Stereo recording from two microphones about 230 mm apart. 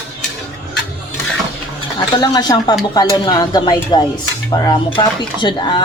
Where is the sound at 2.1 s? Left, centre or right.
Centre.